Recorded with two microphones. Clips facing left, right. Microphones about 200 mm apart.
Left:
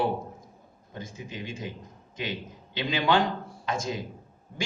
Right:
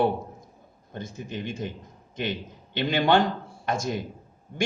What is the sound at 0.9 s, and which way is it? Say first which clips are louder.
Speech: right 4 dB; 60° right (ahead or behind).